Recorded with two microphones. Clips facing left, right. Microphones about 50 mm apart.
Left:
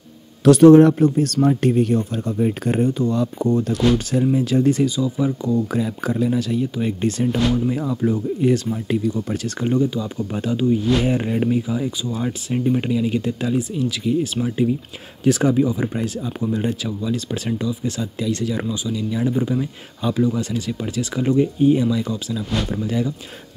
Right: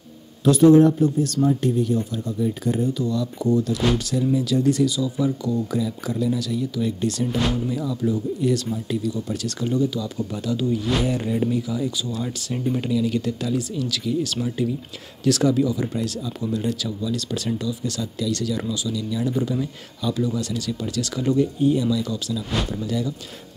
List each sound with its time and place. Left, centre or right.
0.4 s speech: left